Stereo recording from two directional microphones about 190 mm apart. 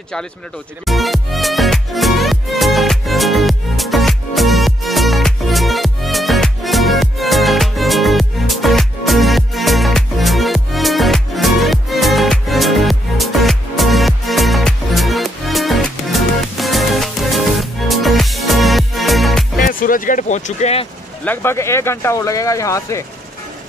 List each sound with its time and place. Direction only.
0.8 s music: centre (ahead or behind)
19.6 s a sound: 45° left (ahead or behind)
21.2 s speech: 10° left (ahead or behind)